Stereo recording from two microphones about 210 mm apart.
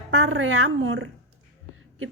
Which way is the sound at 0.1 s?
75° right (ahead or behind).